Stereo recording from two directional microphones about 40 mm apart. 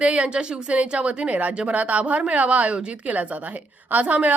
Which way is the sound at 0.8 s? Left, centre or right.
Right.